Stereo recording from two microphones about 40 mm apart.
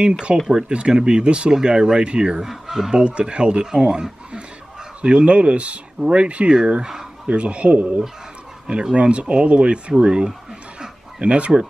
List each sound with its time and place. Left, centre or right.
0.3 s speech: right
2.4 s speech: centre
2.9 s speech: right